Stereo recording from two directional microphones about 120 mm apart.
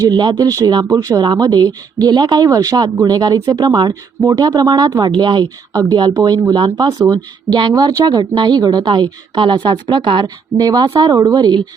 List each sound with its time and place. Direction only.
0.0 s speech: 35° right (ahead or behind)